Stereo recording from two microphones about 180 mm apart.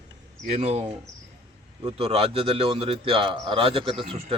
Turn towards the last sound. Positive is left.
turn(degrees=-30)  # may be behind; listen again after turning